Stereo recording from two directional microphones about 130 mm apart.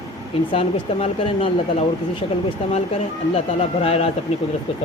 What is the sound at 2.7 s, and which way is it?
Speech, 55° left (ahead or behind).